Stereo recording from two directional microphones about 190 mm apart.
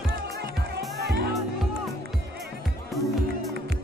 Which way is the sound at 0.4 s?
60° right (ahead or behind).